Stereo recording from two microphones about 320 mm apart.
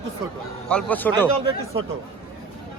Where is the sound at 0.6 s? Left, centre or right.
Centre.